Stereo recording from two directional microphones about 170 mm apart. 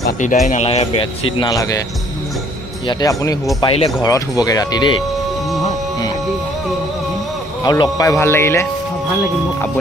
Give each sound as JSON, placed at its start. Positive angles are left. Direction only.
{"t": 0.2, "sound": "speech", "side_deg": 45}
{"t": 1.5, "sound": "speech", "side_deg": 20}
{"t": 2.9, "sound": "speech", "side_deg": 20}
{"t": 3.6, "sound": "speech", "side_deg": 35}
{"t": 4.0, "sound": "speech", "side_deg": 20}
{"t": 7.6, "sound": "speech", "side_deg": 25}